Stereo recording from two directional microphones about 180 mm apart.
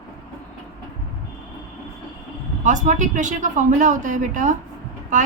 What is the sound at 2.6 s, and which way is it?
A woman's voice, 45° right (ahead or behind).